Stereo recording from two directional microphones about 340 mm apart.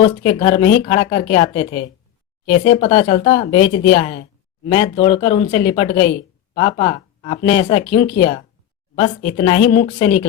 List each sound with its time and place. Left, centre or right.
0.0 s speech: centre